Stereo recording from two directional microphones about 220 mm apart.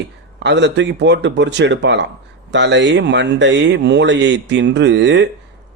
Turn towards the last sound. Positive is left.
turn(degrees=-55)  # may be behind; listen again after turning